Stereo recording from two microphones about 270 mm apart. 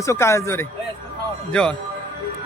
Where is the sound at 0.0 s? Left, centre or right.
Centre.